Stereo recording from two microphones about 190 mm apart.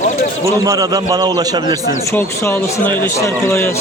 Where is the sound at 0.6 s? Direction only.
20° right (ahead or behind).